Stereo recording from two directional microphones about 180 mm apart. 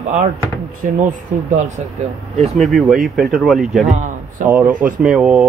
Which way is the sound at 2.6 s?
Centre (ahead or behind).